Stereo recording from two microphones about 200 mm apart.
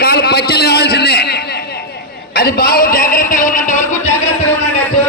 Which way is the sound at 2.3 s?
50° left (ahead or behind).